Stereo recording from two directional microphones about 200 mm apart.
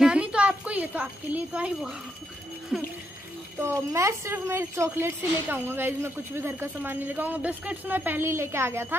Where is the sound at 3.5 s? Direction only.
15° right (ahead or behind).